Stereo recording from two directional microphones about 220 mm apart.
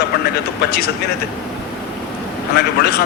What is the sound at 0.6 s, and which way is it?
Speech, 50° left (ahead or behind).